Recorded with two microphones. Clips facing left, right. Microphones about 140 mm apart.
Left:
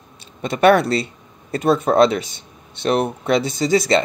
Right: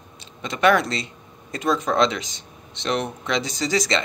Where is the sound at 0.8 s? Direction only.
30° left (ahead or behind).